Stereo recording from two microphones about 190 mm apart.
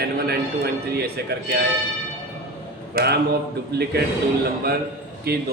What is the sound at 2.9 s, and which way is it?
Speech, 55° right (ahead or behind).